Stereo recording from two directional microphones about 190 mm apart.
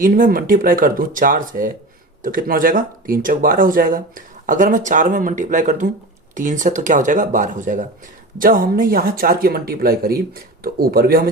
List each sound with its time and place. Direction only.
0.0 s speech: 45° right (ahead or behind)